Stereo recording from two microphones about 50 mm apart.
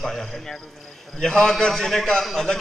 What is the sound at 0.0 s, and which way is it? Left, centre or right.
A man's voice, centre.